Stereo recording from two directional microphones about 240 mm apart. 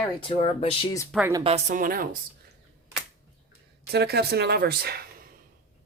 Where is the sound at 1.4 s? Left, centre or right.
Right.